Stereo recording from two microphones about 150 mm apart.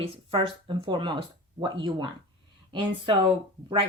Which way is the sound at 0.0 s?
40° right (ahead or behind).